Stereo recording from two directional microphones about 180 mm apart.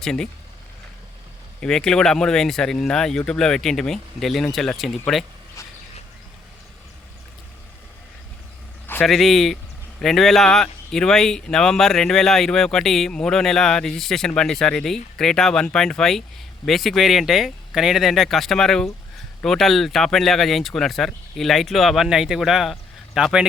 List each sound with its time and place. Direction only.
0.0 s speech: 5° left (ahead or behind)
1.6 s speech: 5° left (ahead or behind)
5.6 s a sound: 15° left (ahead or behind)
8.9 s speech: 5° left (ahead or behind)